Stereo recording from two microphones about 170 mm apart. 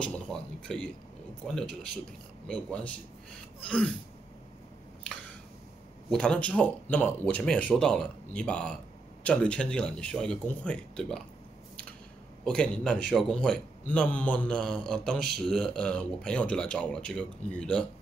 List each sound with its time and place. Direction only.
0.0 s a man's voice: 5° left (ahead or behind)
6.0 s a man's voice: 5° left (ahead or behind)
12.4 s a man's voice: 5° left (ahead or behind)